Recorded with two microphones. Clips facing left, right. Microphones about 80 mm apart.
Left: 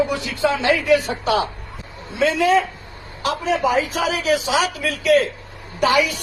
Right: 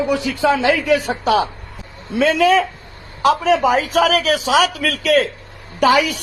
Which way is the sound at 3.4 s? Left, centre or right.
Right.